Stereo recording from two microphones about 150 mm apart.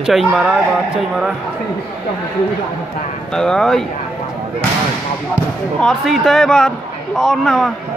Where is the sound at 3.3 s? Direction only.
5° left (ahead or behind).